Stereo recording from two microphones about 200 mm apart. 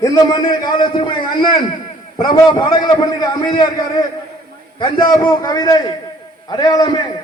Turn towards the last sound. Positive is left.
turn(degrees=20)  # may be behind; listen again after turning